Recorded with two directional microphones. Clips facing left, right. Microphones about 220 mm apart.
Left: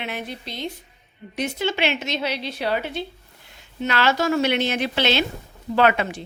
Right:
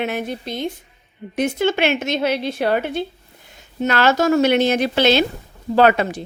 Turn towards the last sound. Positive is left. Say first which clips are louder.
# right 4 dB
turn(degrees=-40)  # may be behind; listen again after turning